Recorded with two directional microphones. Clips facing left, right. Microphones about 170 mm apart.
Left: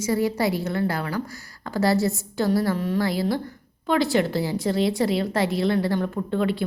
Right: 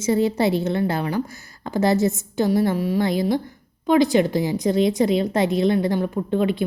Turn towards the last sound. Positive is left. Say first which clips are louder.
# right 3 dB
turn(degrees=-20)  # may be behind; listen again after turning